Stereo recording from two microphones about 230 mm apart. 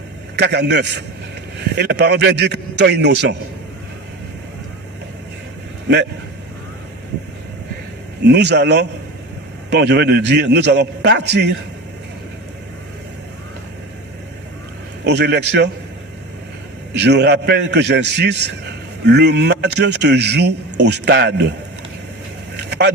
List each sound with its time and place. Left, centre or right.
0.3 s a man's voice: right
8.2 s a man's voice: right
15.0 s a man's voice: right
16.9 s a man's voice: right
22.5 s vehicle: right